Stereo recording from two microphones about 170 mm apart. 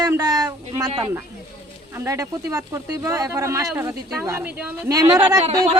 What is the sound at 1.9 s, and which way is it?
Speech, 20° right (ahead or behind).